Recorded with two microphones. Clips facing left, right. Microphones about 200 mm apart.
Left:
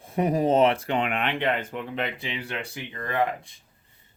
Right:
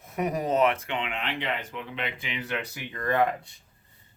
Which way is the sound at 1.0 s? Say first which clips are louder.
Left 6 dB; 55° left (ahead or behind).